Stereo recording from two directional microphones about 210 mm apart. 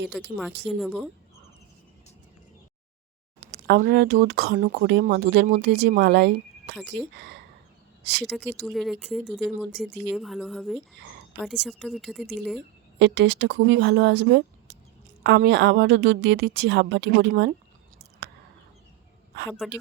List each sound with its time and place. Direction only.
0.1 s speech: centre (ahead or behind)
3.4 s a woman's voice: 50° right (ahead or behind)
8.2 s speech: 5° right (ahead or behind)
13.0 s a woman's voice: 55° right (ahead or behind)
18.2 s a sound: 55° right (ahead or behind)
19.6 s speech: centre (ahead or behind)